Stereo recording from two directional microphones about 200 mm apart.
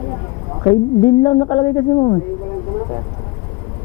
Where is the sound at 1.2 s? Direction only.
20° left (ahead or behind).